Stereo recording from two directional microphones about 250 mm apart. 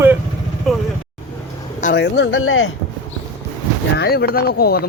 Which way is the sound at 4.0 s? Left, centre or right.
Left.